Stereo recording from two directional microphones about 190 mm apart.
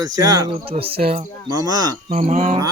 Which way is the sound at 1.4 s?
20° right (ahead or behind).